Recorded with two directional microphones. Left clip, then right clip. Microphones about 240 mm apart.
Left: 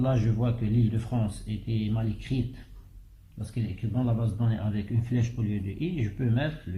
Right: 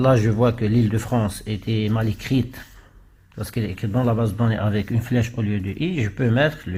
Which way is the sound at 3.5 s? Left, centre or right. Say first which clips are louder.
Right 9 dB; right.